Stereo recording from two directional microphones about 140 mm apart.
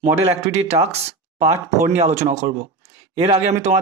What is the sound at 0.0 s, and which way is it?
Speech, 50° right (ahead or behind).